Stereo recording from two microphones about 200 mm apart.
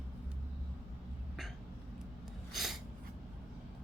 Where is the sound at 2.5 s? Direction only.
Centre (ahead or behind).